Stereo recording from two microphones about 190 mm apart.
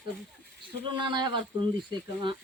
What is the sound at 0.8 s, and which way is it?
Speech, 25° right (ahead or behind).